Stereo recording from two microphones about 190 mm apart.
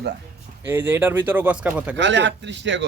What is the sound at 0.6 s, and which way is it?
Speech, 10° right (ahead or behind).